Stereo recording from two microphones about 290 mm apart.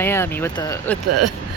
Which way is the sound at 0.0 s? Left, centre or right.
Centre.